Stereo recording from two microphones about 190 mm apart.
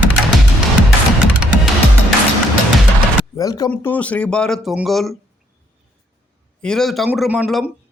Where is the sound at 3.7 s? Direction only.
10° left (ahead or behind).